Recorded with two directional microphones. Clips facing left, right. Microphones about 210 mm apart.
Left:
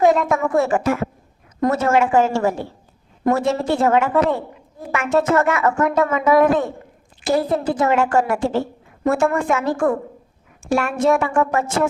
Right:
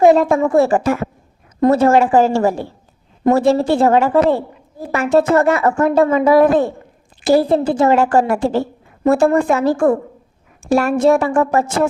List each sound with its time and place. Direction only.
0.1 s a woman's voice: 30° right (ahead or behind)